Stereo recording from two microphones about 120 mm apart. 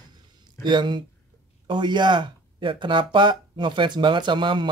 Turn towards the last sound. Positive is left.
turn(degrees=-40)  # may be behind; listen again after turning